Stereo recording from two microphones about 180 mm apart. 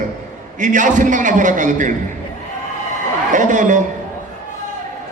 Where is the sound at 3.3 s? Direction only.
45° right (ahead or behind).